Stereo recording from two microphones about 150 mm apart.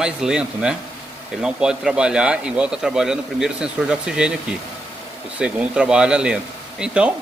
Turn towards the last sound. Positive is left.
turn(degrees=-5)  # may be behind; listen again after turning